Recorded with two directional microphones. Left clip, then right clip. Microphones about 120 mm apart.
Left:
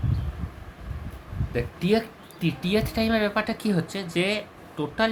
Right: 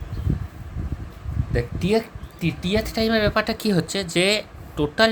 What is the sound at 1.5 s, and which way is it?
Speech, 35° right (ahead or behind).